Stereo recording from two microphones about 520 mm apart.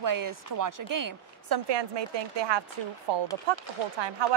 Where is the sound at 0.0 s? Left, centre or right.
Right.